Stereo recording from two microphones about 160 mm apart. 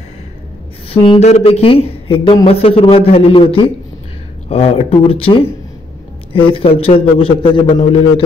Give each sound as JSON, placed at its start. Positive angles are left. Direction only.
{"t": 0.8, "sound": "speech", "side_deg": 35}